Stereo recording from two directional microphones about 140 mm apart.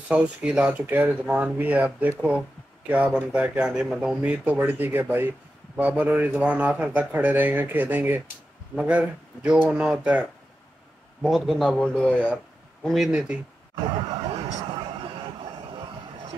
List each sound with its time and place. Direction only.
0.1 s a man's voice: 10° right (ahead or behind)
11.2 s speech: centre (ahead or behind)
12.8 s speech: centre (ahead or behind)
13.8 s a sound: 35° right (ahead or behind)